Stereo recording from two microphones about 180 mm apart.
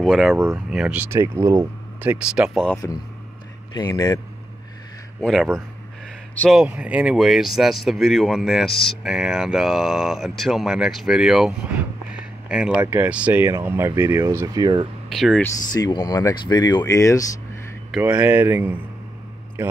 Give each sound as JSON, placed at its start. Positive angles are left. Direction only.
{"t": 0.0, "sound": "speech", "side_deg": 0}
{"t": 0.4, "sound": "speech", "side_deg": -15}
{"t": 3.7, "sound": "speech", "side_deg": 20}
{"t": 5.2, "sound": "speech", "side_deg": 0}
{"t": 6.6, "sound": "speech", "side_deg": -5}
{"t": 15.0, "sound": "speech", "side_deg": 0}
{"t": 15.4, "sound": "speech", "side_deg": 20}
{"t": 17.9, "sound": "speech", "side_deg": -5}